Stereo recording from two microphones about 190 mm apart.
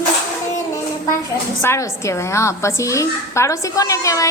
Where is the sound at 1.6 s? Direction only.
15° left (ahead or behind).